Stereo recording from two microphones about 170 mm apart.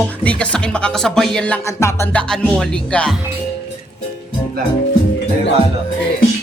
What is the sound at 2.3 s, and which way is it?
Speech, 5° left (ahead or behind).